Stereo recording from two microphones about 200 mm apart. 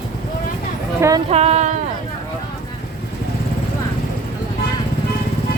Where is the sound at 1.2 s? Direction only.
30° right (ahead or behind).